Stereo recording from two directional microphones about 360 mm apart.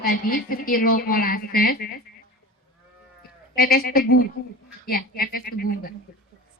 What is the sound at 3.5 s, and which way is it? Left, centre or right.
Speech, left.